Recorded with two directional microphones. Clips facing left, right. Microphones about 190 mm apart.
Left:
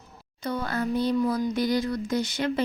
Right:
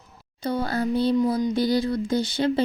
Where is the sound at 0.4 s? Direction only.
30° right (ahead or behind).